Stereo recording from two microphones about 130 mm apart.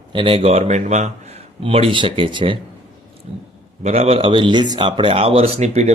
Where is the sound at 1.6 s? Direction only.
45° right (ahead or behind).